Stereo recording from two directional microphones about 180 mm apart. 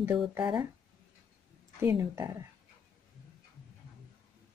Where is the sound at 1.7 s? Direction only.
15° right (ahead or behind).